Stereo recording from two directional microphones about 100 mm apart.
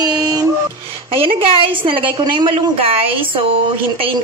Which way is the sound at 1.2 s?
60° right (ahead or behind).